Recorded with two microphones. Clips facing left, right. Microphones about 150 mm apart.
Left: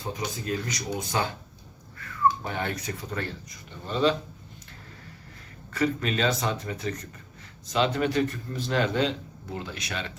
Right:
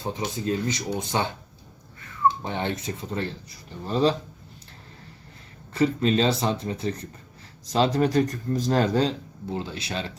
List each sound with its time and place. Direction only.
0.0 s speech: 30° right (ahead or behind)
5.7 s speech: 30° right (ahead or behind)